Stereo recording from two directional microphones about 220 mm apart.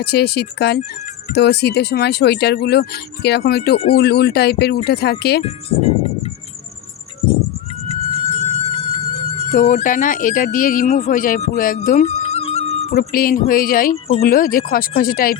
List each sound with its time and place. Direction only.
0.0 s speech: 45° left (ahead or behind)
5.4 s speech: 25° left (ahead or behind)
7.9 s music: 25° right (ahead or behind)
9.5 s speech: 35° left (ahead or behind)
12.9 s speech: 40° left (ahead or behind)